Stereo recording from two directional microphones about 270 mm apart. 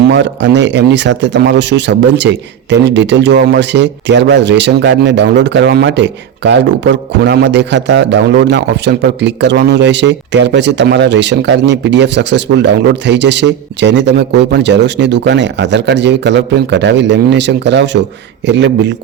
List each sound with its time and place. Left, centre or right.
0.0 s speech: right